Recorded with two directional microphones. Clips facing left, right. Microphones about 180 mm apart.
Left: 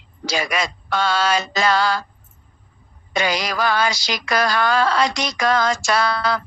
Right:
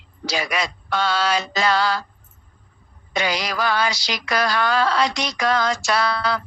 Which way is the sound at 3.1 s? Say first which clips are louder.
Left 2 dB; 45° left (ahead or behind).